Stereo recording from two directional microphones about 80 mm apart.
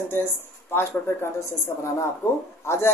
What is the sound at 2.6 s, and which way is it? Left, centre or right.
Speech, left.